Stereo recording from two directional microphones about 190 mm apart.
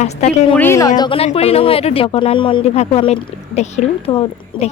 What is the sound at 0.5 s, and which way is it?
Speech, 10° left (ahead or behind).